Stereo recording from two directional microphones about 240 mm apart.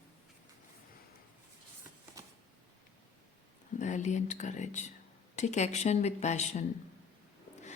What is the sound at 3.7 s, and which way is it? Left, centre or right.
A woman's voice, left.